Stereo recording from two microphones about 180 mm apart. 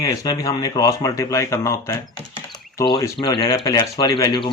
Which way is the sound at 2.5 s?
20° left (ahead or behind).